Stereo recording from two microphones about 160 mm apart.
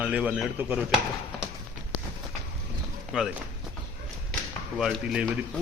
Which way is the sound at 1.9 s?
55° left (ahead or behind).